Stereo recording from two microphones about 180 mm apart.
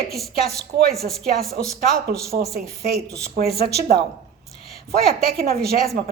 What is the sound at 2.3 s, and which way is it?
A woman's voice, 60° right (ahead or behind).